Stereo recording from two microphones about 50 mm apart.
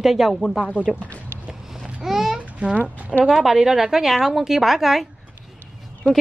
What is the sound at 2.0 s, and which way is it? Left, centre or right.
Babbling, centre.